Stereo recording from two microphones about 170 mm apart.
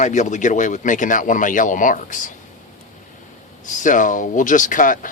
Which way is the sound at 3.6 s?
50° left (ahead or behind).